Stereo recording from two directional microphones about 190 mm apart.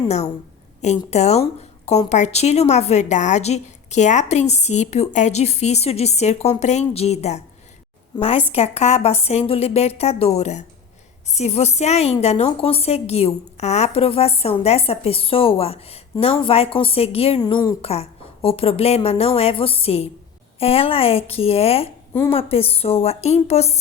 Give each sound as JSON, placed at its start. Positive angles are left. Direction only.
{"t": 0.8, "sound": "a woman's voice", "side_deg": 35}